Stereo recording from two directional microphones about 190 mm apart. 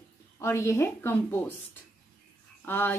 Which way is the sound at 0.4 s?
15° left (ahead or behind).